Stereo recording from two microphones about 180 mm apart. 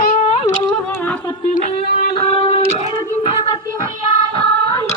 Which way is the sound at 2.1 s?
30° left (ahead or behind).